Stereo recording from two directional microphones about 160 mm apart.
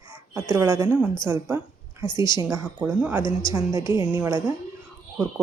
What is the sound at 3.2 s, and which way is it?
Speech, 30° left (ahead or behind).